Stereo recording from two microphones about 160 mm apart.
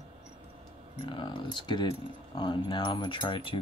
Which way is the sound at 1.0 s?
30° left (ahead or behind).